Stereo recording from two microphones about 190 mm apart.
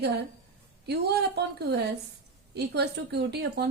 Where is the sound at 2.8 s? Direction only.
60° right (ahead or behind).